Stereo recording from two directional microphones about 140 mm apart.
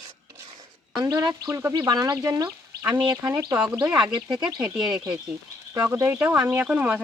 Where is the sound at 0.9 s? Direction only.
25° right (ahead or behind).